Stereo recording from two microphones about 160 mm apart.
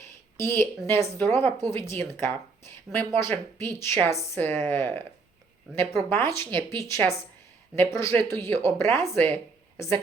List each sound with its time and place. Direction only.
0.3 s speech: 15° left (ahead or behind)
6.1 s speech: 15° left (ahead or behind)